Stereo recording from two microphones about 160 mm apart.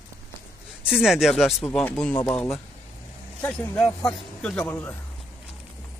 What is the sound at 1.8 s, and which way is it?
Speech, 15° left (ahead or behind).